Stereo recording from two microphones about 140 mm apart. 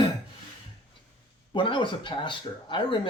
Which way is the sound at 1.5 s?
35° left (ahead or behind).